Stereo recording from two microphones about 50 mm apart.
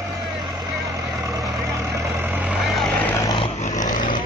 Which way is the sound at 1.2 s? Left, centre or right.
Right.